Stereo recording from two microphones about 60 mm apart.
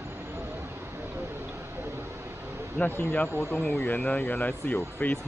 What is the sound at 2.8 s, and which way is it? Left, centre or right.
Speech, left.